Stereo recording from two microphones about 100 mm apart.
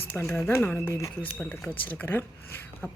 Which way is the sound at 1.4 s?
20° left (ahead or behind).